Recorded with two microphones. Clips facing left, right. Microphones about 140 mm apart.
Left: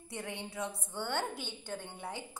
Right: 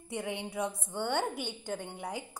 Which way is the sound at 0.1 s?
15° right (ahead or behind).